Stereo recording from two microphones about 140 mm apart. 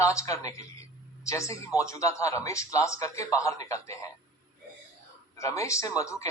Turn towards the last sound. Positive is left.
turn(degrees=25)  # may be behind; listen again after turning